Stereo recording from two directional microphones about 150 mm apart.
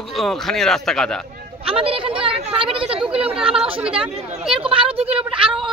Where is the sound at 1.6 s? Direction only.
40° right (ahead or behind).